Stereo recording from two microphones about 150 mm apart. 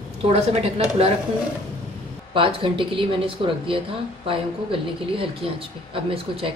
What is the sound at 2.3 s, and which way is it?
Speech, 35° right (ahead or behind).